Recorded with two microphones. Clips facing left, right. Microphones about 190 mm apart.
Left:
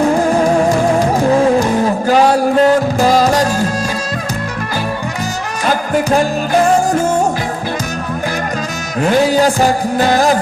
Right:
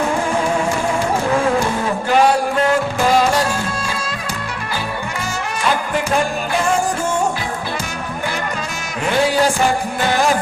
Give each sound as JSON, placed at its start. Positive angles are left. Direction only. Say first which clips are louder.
{"t": 0.2, "sound": "music", "louder": "left 7 dB", "side_deg": 35}
{"t": 2.6, "sound": "music", "louder": "left 6 dB", "side_deg": 40}
{"t": 5.6, "sound": "music", "louder": "left 5 dB", "side_deg": 40}
{"t": 9.2, "sound": "music", "louder": "left 4 dB", "side_deg": 40}